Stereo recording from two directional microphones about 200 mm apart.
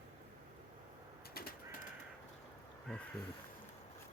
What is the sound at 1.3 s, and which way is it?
Bird, 50° left (ahead or behind).